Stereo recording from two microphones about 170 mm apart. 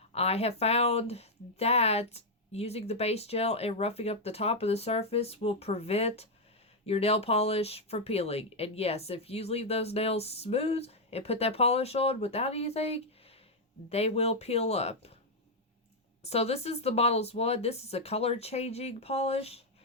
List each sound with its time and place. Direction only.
0.1 s speech: 35° left (ahead or behind)
16.2 s speech: 40° left (ahead or behind)